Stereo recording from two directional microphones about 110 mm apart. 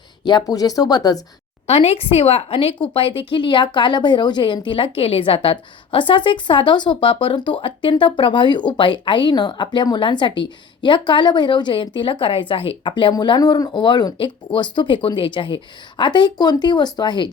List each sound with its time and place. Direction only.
0.3 s speech: 35° left (ahead or behind)
1.6 s speech: 70° left (ahead or behind); by 17.2 s 40° left (ahead or behind)